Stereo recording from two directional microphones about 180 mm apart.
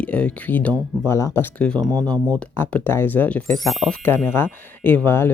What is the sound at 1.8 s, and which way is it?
Speech, 20° right (ahead or behind).